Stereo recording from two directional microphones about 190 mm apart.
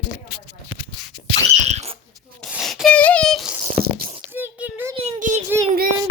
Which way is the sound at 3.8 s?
50° right (ahead or behind).